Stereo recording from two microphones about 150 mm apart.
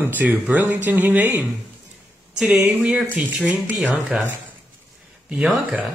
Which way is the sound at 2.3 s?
5° right (ahead or behind).